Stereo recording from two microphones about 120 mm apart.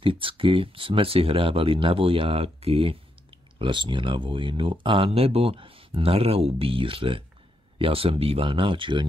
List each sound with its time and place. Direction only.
0.0 s speech: 45° right (ahead or behind)